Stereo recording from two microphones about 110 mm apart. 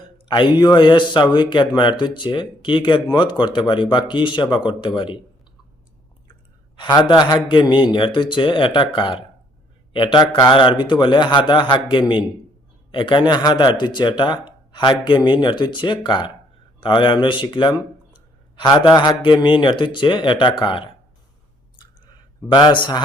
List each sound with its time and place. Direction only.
0.0 s a man's voice: 45° left (ahead or behind)
6.7 s a man's voice: 40° left (ahead or behind)
22.5 s a man's voice: 45° left (ahead or behind)